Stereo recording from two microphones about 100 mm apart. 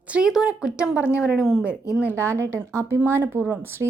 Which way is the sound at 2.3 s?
30° right (ahead or behind).